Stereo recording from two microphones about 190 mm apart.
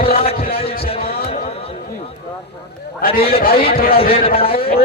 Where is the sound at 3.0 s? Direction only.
50° left (ahead or behind).